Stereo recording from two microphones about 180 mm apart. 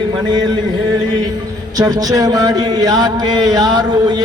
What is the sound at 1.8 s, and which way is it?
Speech, 20° right (ahead or behind).